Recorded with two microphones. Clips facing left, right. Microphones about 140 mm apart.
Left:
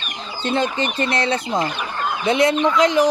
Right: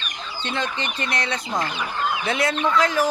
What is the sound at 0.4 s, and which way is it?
Speech, 35° left (ahead or behind).